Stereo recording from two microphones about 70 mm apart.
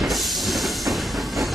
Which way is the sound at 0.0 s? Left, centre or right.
Centre.